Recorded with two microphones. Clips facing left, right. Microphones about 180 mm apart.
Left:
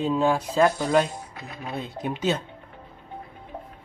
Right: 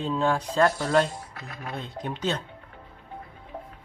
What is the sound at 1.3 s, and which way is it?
Speech, 20° left (ahead or behind).